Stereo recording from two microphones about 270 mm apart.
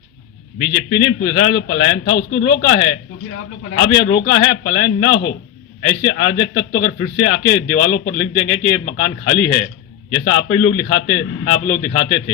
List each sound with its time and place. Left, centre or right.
1.2 s a man's voice: left